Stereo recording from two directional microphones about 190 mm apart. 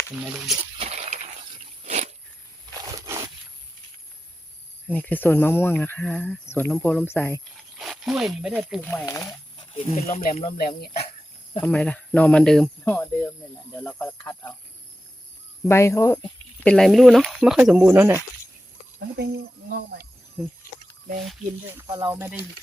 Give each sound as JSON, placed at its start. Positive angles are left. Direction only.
{"t": 0.2, "sound": "speech", "side_deg": -5}
{"t": 0.8, "sound": "a sound", "side_deg": -35}
{"t": 2.8, "sound": "a sound", "side_deg": -15}
{"t": 4.9, "sound": "speech", "side_deg": 10}
{"t": 7.5, "sound": "speech", "side_deg": 0}
{"t": 8.8, "sound": "speech", "side_deg": 10}
{"t": 9.0, "sound": "speech", "side_deg": 20}
{"t": 9.7, "sound": "speech", "side_deg": 35}
{"t": 10.2, "sound": "speech", "side_deg": 45}
{"t": 11.6, "sound": "speech", "side_deg": 5}
{"t": 15.6, "sound": "speech", "side_deg": 15}
{"t": 16.7, "sound": "speech", "side_deg": 0}
{"t": 18.9, "sound": "speech", "side_deg": -65}
{"t": 21.8, "sound": "speech", "side_deg": -25}